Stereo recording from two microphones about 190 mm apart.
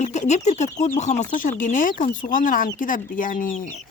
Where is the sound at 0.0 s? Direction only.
35° left (ahead or behind).